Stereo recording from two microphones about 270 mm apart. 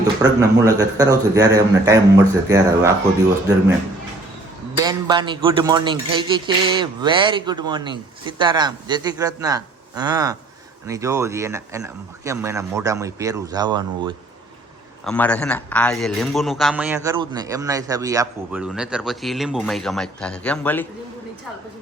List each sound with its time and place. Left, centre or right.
0.2 s speech: centre
4.8 s speech: centre
15.0 s a man's voice: centre